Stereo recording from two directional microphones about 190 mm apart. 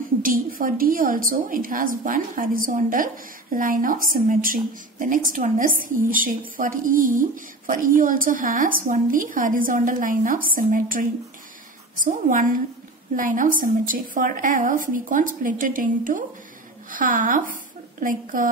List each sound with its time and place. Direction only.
0.2 s a woman's voice: 45° right (ahead or behind)